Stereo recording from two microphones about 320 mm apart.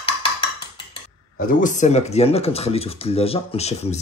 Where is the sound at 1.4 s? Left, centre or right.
Left.